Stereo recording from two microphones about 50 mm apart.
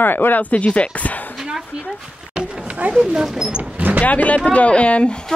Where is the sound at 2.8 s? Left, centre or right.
Right.